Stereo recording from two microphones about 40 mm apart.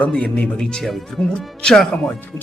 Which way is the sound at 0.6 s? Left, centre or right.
Centre.